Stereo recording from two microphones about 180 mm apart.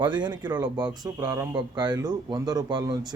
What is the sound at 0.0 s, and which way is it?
Speech, 25° right (ahead or behind).